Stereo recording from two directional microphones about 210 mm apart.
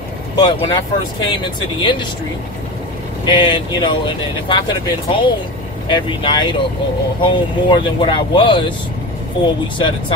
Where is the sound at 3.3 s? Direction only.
20° left (ahead or behind).